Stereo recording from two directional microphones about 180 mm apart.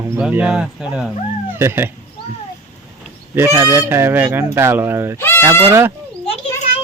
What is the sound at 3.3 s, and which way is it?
Speech, 15° right (ahead or behind).